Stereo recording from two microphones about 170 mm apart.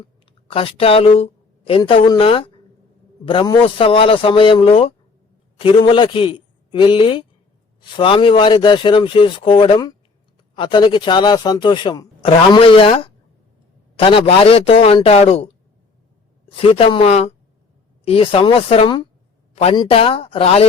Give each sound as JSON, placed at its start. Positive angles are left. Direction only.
{"t": 0.5, "sound": "a woman's voice", "side_deg": 35}
{"t": 16.6, "sound": "a woman's voice", "side_deg": 35}